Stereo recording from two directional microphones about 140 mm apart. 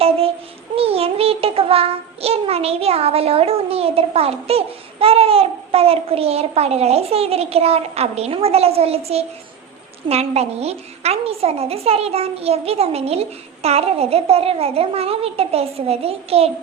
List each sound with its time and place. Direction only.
0.8 s child singing: 45° right (ahead or behind)